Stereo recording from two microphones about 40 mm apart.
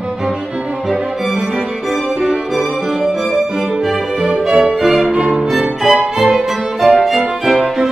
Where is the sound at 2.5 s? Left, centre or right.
Centre.